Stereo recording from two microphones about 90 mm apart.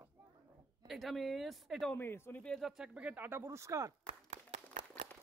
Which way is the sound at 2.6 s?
10° right (ahead or behind).